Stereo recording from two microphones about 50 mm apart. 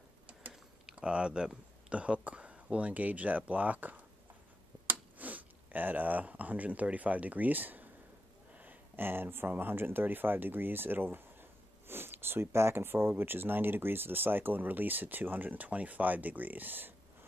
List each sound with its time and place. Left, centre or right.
0.3 s a sound: right
0.9 s speech: centre; by 7.9 s right
8.9 s speech: right